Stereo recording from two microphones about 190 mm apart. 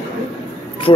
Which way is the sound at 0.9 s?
25° left (ahead or behind).